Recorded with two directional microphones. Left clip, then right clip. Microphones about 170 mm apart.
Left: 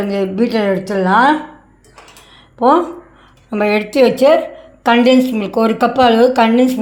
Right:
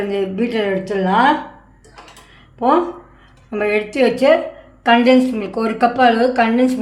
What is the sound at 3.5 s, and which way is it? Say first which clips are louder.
A woman's voice: left 3 dB; 25° left (ahead or behind).